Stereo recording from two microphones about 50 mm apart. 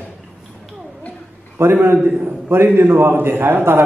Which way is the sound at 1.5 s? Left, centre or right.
Right.